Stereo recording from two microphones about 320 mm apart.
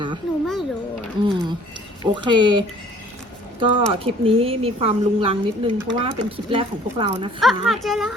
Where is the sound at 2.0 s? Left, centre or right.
Centre.